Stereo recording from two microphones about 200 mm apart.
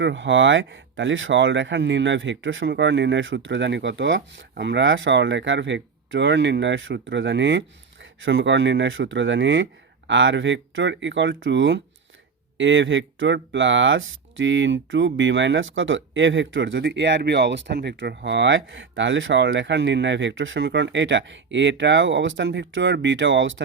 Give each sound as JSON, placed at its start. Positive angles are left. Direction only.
{"t": 0.0, "sound": "speech", "side_deg": -65}